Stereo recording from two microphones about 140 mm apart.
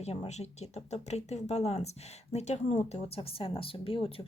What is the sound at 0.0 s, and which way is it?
Speech, 50° left (ahead or behind).